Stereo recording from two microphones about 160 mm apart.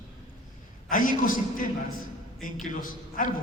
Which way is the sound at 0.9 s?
55° left (ahead or behind).